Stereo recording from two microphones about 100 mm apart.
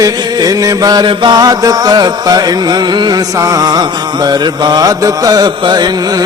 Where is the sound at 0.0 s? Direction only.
40° right (ahead or behind).